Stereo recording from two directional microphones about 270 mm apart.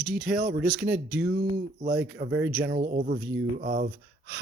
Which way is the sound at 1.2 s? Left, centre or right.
Right.